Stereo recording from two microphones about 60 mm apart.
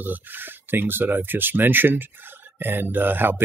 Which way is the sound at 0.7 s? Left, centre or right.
Right.